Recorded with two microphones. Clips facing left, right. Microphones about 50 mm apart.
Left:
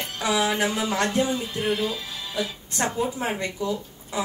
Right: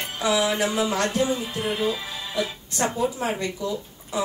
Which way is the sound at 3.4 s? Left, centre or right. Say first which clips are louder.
Even; left.